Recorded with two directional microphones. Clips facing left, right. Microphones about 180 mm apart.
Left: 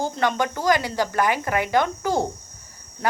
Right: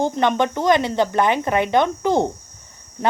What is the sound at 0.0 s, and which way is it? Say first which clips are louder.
Speech: right 4 dB; 20° right (ahead or behind).